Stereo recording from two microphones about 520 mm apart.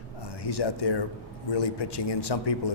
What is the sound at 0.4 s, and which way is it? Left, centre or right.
A man's voice, left.